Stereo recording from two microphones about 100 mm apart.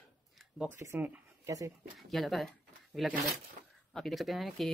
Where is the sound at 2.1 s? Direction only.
Centre (ahead or behind).